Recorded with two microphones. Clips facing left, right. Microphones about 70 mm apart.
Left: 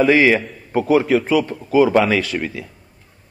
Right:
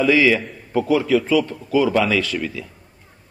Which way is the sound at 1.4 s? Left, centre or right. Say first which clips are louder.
Left 4 dB; left.